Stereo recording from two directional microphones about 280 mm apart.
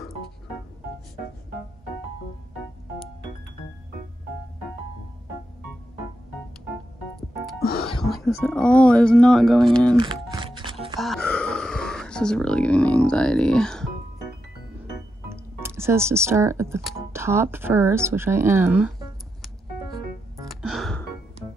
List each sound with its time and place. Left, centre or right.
8.0 s speech: centre
9.9 s music: centre
11.0 s a sound: centre
15.2 s music: centre